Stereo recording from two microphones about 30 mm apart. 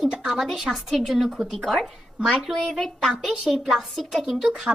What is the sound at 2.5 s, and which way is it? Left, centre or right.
Speech, centre.